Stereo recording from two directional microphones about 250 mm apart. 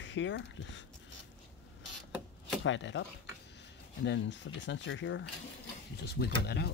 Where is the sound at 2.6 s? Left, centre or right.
Left.